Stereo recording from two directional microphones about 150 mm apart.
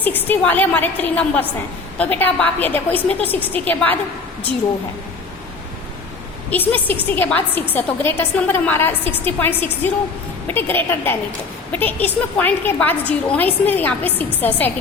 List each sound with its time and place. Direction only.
0.0 s a woman's voice: 15° left (ahead or behind)
6.5 s a woman's voice: 10° left (ahead or behind)